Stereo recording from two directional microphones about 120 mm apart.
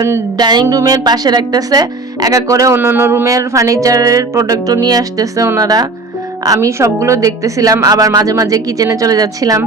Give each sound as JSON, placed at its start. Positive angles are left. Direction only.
{"t": 0.3, "sound": "speech", "side_deg": -35}